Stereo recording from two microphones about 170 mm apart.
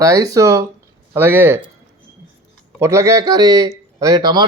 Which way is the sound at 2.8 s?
15° right (ahead or behind).